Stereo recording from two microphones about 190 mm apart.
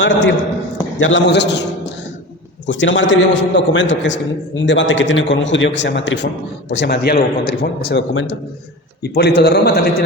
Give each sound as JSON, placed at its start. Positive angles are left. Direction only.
{"t": 0.0, "sound": "a man's voice", "side_deg": 75}
{"t": 2.6, "sound": "a man's voice", "side_deg": 75}
{"t": 7.9, "sound": "speech", "side_deg": 80}
{"t": 9.0, "sound": "a man's voice", "side_deg": 60}